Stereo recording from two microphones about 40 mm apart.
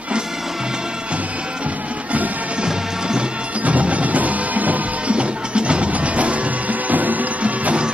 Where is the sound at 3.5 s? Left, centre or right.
Right.